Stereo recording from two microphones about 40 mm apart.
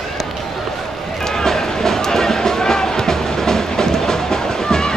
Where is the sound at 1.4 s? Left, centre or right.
Centre.